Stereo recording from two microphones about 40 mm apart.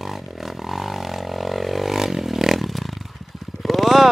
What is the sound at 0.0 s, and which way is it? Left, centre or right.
Vehicle, centre.